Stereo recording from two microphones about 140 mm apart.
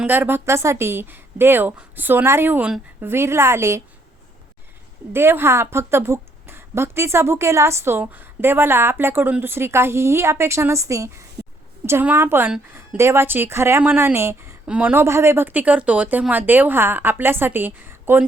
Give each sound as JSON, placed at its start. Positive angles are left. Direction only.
{"t": 0.0, "sound": "a woman's voice", "side_deg": -15}
{"t": 5.1, "sound": "a woman's voice", "side_deg": -15}